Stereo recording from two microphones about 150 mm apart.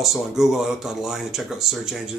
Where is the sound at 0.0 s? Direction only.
Centre (ahead or behind).